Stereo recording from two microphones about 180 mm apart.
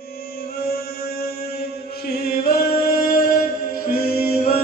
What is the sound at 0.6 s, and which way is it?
Mantra, 60° left (ahead or behind).